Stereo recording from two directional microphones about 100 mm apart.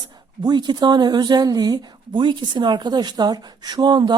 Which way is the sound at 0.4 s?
45° right (ahead or behind).